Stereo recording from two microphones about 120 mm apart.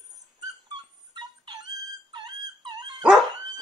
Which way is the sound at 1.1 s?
35° right (ahead or behind).